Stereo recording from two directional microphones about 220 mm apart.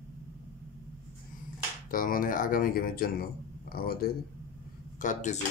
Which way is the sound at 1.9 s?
40° left (ahead or behind).